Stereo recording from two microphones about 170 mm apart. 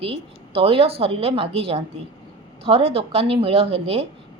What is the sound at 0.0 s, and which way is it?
A woman's voice, 35° right (ahead or behind).